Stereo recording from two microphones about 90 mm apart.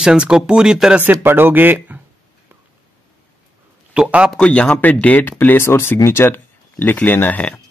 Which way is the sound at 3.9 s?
15° right (ahead or behind).